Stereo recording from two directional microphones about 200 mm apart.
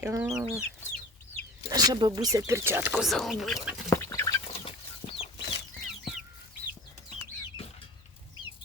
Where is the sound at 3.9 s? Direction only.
15° left (ahead or behind).